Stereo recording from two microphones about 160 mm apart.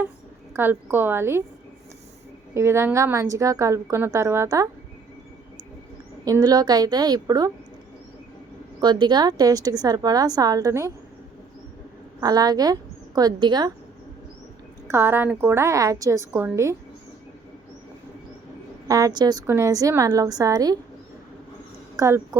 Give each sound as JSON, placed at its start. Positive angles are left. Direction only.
{"t": 0.5, "sound": "a woman's voice", "side_deg": -15}
{"t": 2.6, "sound": "a woman's voice", "side_deg": -15}
{"t": 6.2, "sound": "a woman's voice", "side_deg": -25}
{"t": 8.8, "sound": "a woman's voice", "side_deg": -25}
{"t": 12.2, "sound": "a woman's voice", "side_deg": -25}
{"t": 14.8, "sound": "a woman's voice", "side_deg": -15}
{"t": 18.9, "sound": "a woman's voice", "side_deg": -20}
{"t": 21.9, "sound": "a woman's voice", "side_deg": -20}